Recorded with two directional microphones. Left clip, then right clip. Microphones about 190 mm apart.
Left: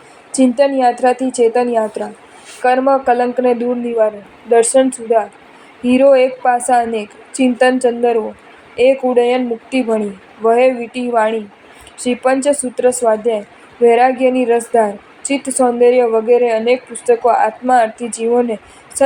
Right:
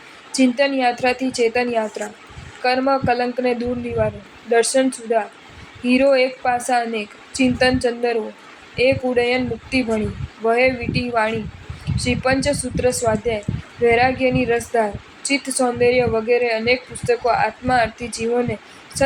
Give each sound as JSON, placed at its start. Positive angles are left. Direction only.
{"t": 0.3, "sound": "a woman's voice", "side_deg": 25}